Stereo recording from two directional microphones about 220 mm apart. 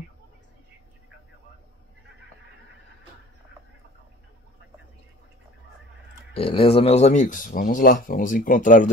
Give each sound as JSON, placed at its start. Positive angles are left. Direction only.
{"t": 6.3, "sound": "speech", "side_deg": 25}